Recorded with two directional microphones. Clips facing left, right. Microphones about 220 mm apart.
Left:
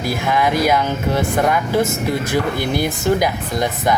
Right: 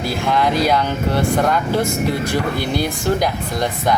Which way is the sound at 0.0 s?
15° left (ahead or behind).